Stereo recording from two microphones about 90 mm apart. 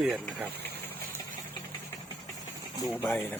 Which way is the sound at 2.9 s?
20° left (ahead or behind).